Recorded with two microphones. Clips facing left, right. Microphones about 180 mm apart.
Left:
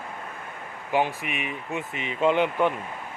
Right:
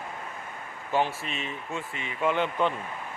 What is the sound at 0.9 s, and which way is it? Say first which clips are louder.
Speech: left 2 dB; 15° left (ahead or behind).